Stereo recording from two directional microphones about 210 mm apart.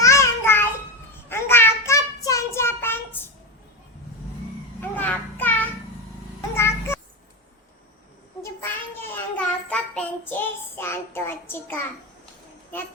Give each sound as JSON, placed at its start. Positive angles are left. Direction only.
{"t": 0.0, "sound": "a sound", "side_deg": 15}
{"t": 1.3, "sound": "child singing", "side_deg": 10}
{"t": 4.8, "sound": "children playing", "side_deg": 10}
{"t": 6.6, "sound": "music", "side_deg": 10}
{"t": 8.4, "sound": "child singing", "side_deg": 10}